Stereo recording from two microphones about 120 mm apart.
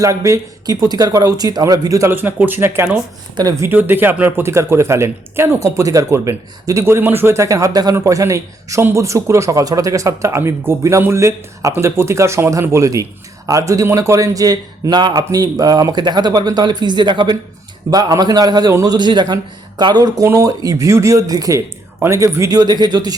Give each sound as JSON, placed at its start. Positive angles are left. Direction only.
{"t": 0.0, "sound": "a man's voice", "side_deg": -25}